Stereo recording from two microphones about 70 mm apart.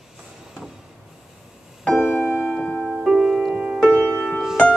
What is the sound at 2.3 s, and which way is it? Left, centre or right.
Music, centre.